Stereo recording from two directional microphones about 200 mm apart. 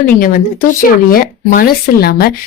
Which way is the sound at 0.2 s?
45° left (ahead or behind).